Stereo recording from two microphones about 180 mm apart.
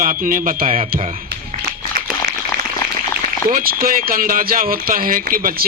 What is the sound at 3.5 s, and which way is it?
A man's voice, 50° right (ahead or behind).